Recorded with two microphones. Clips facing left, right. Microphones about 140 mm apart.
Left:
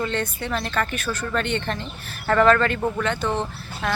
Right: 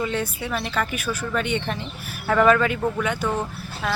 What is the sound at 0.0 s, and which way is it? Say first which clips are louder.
Speech: even; 10° right (ahead or behind).